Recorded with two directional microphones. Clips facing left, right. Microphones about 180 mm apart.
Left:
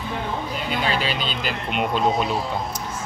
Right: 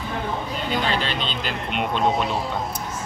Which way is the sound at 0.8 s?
5° left (ahead or behind).